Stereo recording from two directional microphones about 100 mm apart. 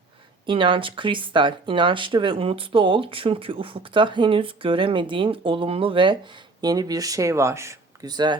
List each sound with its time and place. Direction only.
0.4 s speech: 60° right (ahead or behind)
6.6 s speech: 40° right (ahead or behind)
8.0 s speech: 45° right (ahead or behind)